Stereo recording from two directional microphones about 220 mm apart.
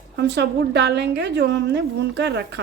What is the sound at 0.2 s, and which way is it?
A woman's voice, 50° right (ahead or behind).